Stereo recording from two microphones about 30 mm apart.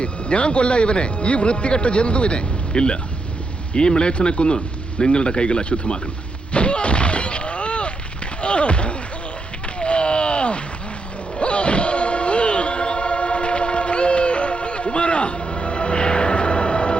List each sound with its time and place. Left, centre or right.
0.0 s speech: left
6.5 s artillery fire: left
8.4 s a sound: left